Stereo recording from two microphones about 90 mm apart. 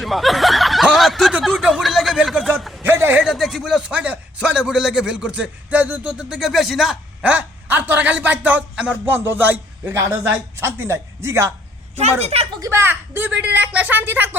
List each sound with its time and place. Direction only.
0.0 s speech: centre (ahead or behind)
1.6 s a sound: 5° right (ahead or behind)
2.8 s a sound: 25° right (ahead or behind)
3.2 s a man's voice: centre (ahead or behind)
9.0 s a man's voice: 20° right (ahead or behind)
12.3 s speech: 90° right
12.5 s a child's voice: 35° right (ahead or behind)
12.8 s a man's voice: 20° right (ahead or behind)